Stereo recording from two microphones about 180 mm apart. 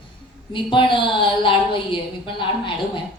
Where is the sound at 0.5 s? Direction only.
25° left (ahead or behind).